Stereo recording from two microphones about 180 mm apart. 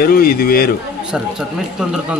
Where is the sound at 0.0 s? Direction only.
55° left (ahead or behind).